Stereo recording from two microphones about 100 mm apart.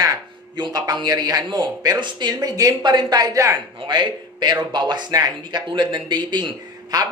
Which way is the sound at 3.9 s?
50° right (ahead or behind).